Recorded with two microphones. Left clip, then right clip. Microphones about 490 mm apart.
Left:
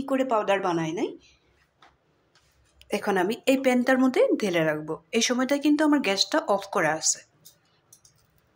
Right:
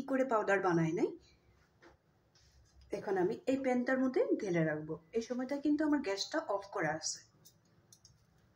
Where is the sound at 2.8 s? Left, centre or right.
Centre.